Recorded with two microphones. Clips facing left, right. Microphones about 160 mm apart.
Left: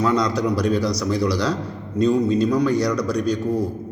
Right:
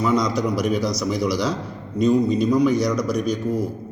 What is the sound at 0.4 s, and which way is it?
A man's voice, 15° right (ahead or behind).